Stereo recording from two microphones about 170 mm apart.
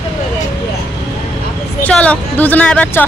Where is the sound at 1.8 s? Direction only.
5° left (ahead or behind).